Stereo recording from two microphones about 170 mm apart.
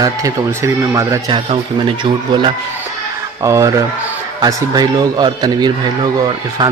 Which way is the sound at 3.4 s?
20° right (ahead or behind).